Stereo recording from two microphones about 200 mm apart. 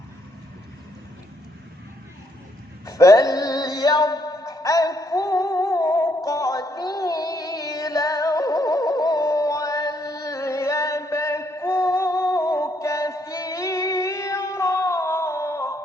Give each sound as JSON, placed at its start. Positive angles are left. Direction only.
{"t": 2.8, "sound": "male singing", "side_deg": 15}